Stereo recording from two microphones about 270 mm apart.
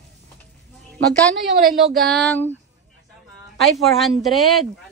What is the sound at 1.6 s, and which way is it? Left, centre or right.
Speech, right.